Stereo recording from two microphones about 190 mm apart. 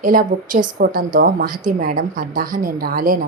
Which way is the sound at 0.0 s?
45° right (ahead or behind).